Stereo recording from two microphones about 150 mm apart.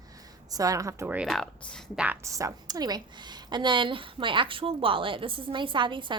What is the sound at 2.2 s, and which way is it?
A woman's voice, 20° right (ahead or behind).